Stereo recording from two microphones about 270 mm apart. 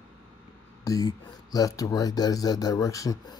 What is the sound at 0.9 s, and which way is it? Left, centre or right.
Speech, centre.